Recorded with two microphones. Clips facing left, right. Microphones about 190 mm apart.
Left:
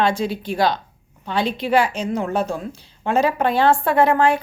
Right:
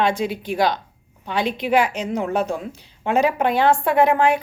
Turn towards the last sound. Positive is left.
turn(degrees=-20)  # may be behind; listen again after turning